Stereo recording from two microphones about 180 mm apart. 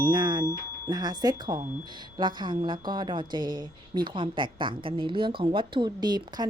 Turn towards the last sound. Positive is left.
turn(degrees=-25)  # may be behind; listen again after turning